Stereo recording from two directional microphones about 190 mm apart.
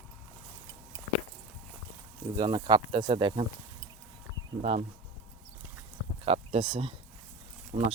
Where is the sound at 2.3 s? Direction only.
20° right (ahead or behind).